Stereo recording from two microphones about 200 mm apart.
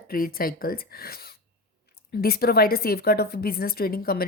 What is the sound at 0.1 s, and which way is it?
A woman's voice, 45° left (ahead or behind).